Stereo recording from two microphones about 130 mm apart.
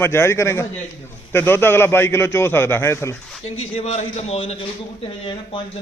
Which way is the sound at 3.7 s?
55° left (ahead or behind).